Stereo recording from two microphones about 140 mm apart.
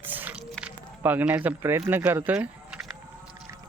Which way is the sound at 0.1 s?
10° right (ahead or behind).